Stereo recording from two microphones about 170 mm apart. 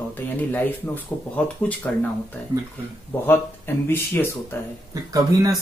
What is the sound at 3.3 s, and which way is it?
Speech, 15° left (ahead or behind).